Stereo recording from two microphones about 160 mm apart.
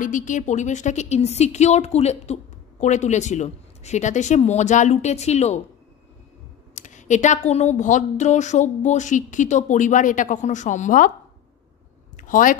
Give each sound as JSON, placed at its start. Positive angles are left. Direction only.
{"t": 0.0, "sound": "speech", "side_deg": 55}
{"t": 6.7, "sound": "speech", "side_deg": 50}
{"t": 12.2, "sound": "speech", "side_deg": 55}